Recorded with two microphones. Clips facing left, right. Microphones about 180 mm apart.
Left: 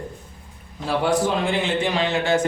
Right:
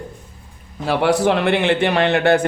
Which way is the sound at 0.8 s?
70° right (ahead or behind).